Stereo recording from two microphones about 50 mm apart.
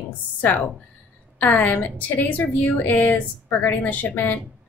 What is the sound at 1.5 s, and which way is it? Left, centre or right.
A woman's voice, left.